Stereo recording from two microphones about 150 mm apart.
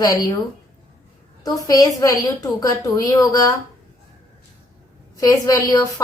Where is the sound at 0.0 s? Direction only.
25° left (ahead or behind).